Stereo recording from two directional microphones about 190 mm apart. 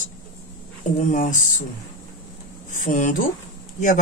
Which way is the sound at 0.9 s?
40° left (ahead or behind).